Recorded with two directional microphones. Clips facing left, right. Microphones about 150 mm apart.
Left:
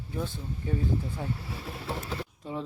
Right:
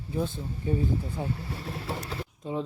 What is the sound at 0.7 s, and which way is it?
Speech, 20° right (ahead or behind).